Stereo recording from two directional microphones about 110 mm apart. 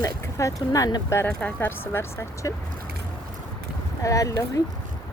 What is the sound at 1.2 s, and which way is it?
Speech, 15° left (ahead or behind).